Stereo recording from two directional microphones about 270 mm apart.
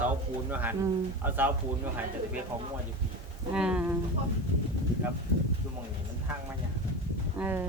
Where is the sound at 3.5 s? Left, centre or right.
Centre.